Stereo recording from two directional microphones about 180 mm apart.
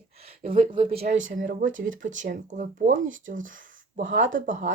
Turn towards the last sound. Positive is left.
turn(degrees=-45)  # may be behind; listen again after turning